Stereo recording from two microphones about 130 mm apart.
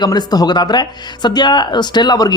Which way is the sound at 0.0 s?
30° left (ahead or behind).